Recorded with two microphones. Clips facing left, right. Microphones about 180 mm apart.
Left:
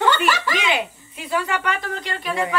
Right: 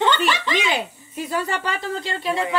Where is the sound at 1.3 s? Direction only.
35° right (ahead or behind).